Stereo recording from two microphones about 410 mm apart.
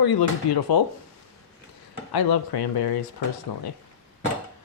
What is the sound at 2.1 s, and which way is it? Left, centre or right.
Speech, left.